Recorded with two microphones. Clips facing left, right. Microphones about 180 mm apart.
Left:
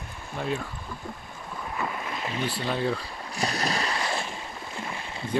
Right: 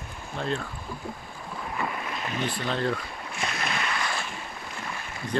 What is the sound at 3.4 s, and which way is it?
Boat, 35° left (ahead or behind).